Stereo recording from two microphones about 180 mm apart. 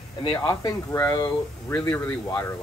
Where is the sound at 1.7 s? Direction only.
10° left (ahead or behind).